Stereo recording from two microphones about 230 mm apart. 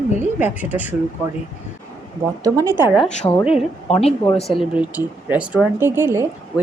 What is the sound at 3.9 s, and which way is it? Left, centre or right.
Speech, left.